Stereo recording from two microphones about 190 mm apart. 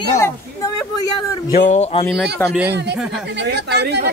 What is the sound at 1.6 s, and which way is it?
Speech, 35° left (ahead or behind).